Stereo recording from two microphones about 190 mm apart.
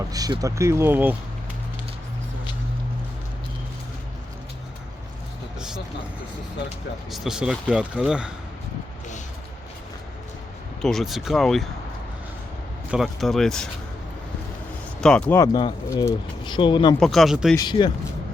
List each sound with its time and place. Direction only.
0.1 s speech: 20° right (ahead or behind)
5.5 s vehicle: 5° right (ahead or behind)
7.1 s speech: 5° right (ahead or behind)
10.8 s speech: centre (ahead or behind)
12.9 s speech: centre (ahead or behind)
15.0 s speech: 5° left (ahead or behind)
15.4 s speech: 20° left (ahead or behind)
17.0 s speech: centre (ahead or behind)
17.6 s speech: 25° left (ahead or behind)